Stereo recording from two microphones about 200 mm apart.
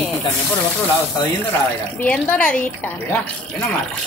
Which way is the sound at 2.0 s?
5° left (ahead or behind).